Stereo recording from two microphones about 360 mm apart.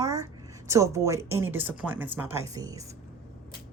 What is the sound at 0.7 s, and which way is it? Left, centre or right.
Speech, centre.